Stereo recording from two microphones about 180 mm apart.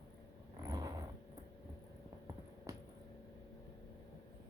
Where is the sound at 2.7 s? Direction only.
15° right (ahead or behind).